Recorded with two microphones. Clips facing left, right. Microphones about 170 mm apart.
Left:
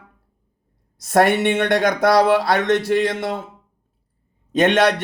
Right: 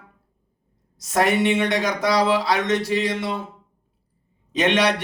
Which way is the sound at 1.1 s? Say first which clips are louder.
Left 3 dB; 60° left (ahead or behind).